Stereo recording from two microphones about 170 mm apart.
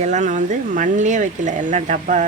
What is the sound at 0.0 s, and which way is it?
Speech, 45° right (ahead or behind).